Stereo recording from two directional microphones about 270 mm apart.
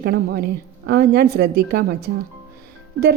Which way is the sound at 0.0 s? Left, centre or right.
Right.